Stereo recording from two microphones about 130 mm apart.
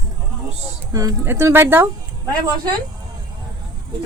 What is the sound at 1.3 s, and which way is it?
Speech, 20° right (ahead or behind).